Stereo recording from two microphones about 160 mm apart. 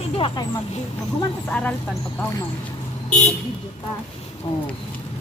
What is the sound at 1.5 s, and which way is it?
Speech, 10° left (ahead or behind).